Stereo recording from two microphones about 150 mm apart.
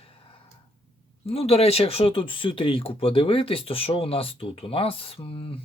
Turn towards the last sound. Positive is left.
turn(degrees=40)  # may be behind; listen again after turning